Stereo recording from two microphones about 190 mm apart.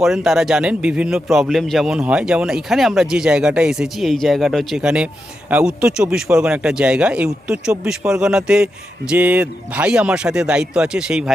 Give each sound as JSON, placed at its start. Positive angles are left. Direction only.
{"t": 0.0, "sound": "speech", "side_deg": 0}